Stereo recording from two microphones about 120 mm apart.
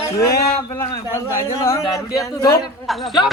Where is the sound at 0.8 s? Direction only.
20° left (ahead or behind).